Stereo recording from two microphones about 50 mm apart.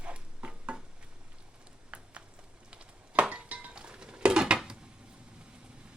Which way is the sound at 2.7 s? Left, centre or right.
Right.